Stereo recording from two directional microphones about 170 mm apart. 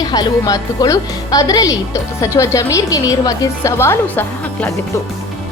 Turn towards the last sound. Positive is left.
turn(degrees=10)  # may be behind; listen again after turning